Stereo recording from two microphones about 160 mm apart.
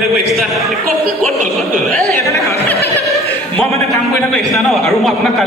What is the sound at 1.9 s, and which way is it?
Speech, 15° left (ahead or behind).